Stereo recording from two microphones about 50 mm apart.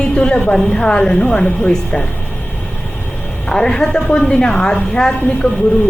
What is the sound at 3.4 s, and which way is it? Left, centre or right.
A woman's voice, centre.